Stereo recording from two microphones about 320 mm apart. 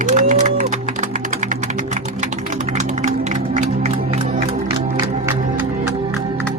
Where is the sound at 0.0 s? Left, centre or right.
Right.